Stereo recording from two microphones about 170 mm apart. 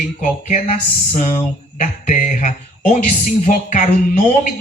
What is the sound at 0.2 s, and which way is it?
Speech, 45° left (ahead or behind).